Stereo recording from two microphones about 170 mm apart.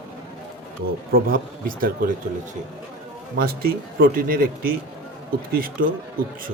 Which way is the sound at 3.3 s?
60° right (ahead or behind).